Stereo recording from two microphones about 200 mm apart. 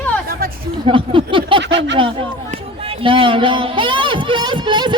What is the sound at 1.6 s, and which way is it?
Speech, 60° right (ahead or behind).